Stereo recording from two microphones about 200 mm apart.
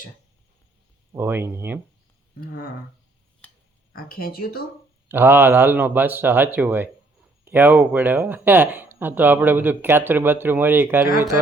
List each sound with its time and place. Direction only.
1.1 s speech: 10° right (ahead or behind)
3.9 s speech: 45° left (ahead or behind)
5.0 s speech: 10° right (ahead or behind)